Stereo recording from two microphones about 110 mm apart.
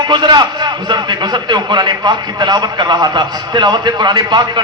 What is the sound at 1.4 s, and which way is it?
A man's voice, 40° right (ahead or behind).